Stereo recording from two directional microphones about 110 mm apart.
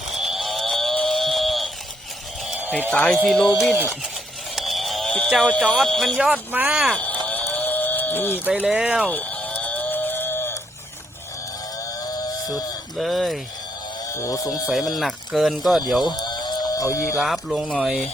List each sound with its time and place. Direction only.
0.1 s cattle: centre (ahead or behind)
2.9 s speech: 5° left (ahead or behind)
4.5 s a sound: centre (ahead or behind)
5.4 s speech: 10° left (ahead or behind); by 6.9 s 10° right (ahead or behind)
6.9 s a sound: 10° left (ahead or behind)
7.5 s sheep: 15° left (ahead or behind)
8.4 s speech: 10° right (ahead or behind)
9.0 s livestock: 15° left (ahead or behind)
12.1 s a sound: 35° left (ahead or behind)
13.0 s speech: centre (ahead or behind)
14.1 s speech: 30° left (ahead or behind)
14.9 s speech: centre (ahead or behind)
16.0 s a sound: 40° left (ahead or behind)
17.2 s speech: centre (ahead or behind)